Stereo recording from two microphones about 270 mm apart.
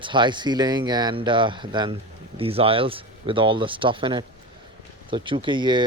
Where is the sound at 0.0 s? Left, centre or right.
Centre.